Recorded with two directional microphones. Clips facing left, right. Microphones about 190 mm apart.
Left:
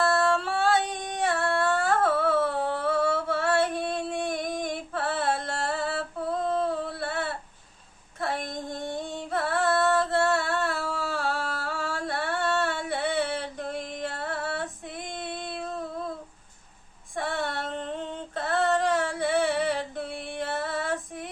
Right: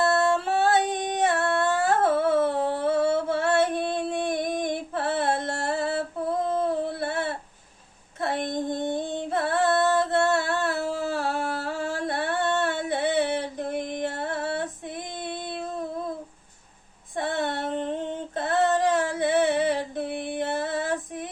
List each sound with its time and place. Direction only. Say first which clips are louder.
0.0 s female singing: right 2 dB; 20° right (ahead or behind)
0.9 s a sound: right 4 dB; 20° right (ahead or behind)
8.2 s music: right 4 dB; 25° right (ahead or behind)
14.0 s female singing: right 3 dB; 20° right (ahead or behind)
17.2 s female singing: right 3 dB; 20° right (ahead or behind)